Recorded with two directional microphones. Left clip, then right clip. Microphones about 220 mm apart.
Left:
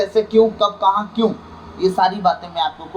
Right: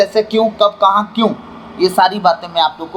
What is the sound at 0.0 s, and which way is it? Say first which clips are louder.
A man's voice: right 2 dB; 40° right (ahead or behind).